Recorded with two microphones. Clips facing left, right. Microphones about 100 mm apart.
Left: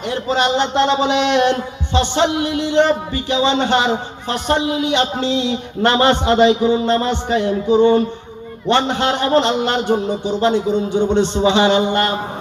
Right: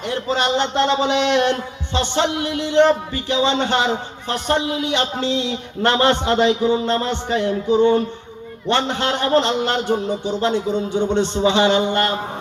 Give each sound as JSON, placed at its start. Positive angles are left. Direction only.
{"t": 0.0, "sound": "a man's voice", "side_deg": 15}